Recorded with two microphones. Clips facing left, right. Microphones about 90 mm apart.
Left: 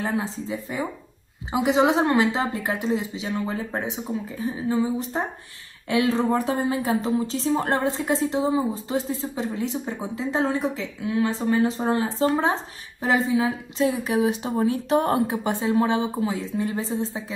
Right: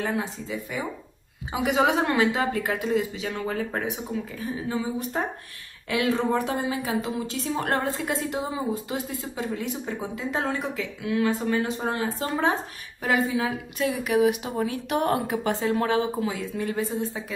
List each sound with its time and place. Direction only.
0.0 s a woman's voice: 30° left (ahead or behind)